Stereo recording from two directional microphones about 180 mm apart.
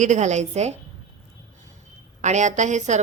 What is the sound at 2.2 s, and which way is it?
Speech, 40° right (ahead or behind).